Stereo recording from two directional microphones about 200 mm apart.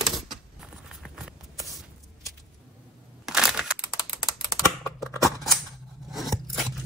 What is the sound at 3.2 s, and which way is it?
Computer keyboard, 5° right (ahead or behind).